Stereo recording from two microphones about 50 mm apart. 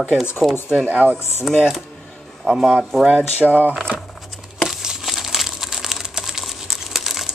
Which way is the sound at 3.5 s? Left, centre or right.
Right.